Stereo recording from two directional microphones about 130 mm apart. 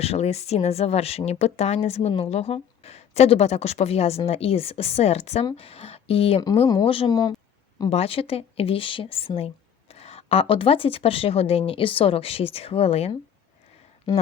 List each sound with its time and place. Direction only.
0.0 s speech: 55° left (ahead or behind)
7.1 s speech: 30° left (ahead or behind)
7.9 s speech: 50° left (ahead or behind)